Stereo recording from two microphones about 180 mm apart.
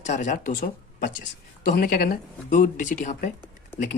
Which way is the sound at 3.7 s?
10° left (ahead or behind).